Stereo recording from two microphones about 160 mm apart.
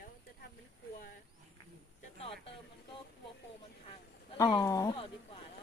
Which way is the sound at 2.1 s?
35° left (ahead or behind).